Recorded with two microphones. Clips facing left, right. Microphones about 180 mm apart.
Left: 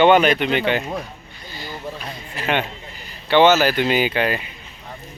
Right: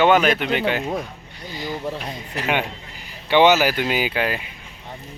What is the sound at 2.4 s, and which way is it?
Speech, 10° right (ahead or behind).